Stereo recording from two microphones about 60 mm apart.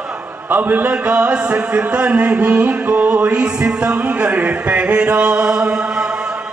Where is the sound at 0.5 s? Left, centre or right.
Right; by 5.7 s centre.